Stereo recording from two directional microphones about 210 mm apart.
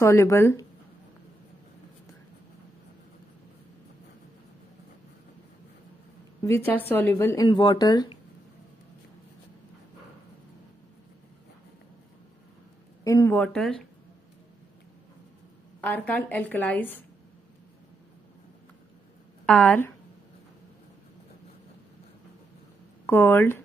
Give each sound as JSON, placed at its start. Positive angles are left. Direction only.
{"t": 0.0, "sound": "speech", "side_deg": 15}
{"t": 6.4, "sound": "speech", "side_deg": 10}
{"t": 13.0, "sound": "speech", "side_deg": 15}
{"t": 15.8, "sound": "speech", "side_deg": 10}
{"t": 19.4, "sound": "a woman's voice", "side_deg": 5}
{"t": 23.0, "sound": "speech", "side_deg": 10}